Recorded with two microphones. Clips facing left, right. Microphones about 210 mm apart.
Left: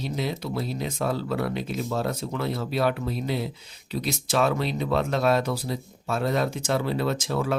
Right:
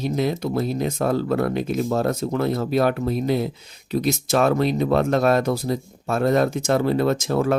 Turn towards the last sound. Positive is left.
turn(degrees=-50)  # may be behind; listen again after turning